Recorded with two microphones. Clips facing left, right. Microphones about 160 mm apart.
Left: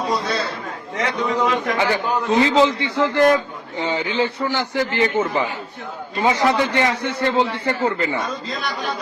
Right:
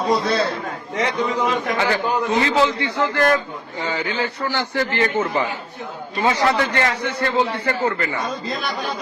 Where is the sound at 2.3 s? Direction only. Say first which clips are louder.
Left 5 dB; 20° left (ahead or behind).